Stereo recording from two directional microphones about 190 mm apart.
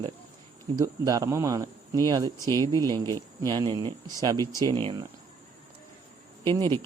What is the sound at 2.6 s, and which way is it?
Speech, 15° left (ahead or behind).